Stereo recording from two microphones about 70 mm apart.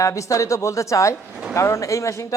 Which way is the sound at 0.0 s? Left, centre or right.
Left.